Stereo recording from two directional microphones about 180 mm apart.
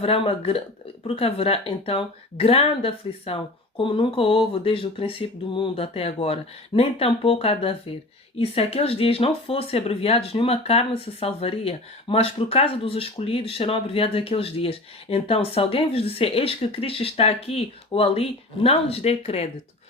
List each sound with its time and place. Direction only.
0.0 s speech: 35° left (ahead or behind)